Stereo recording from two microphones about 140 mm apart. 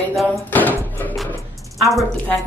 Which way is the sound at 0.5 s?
10° left (ahead or behind).